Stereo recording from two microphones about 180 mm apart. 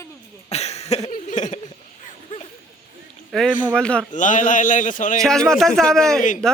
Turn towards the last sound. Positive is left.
turn(degrees=5)  # may be behind; listen again after turning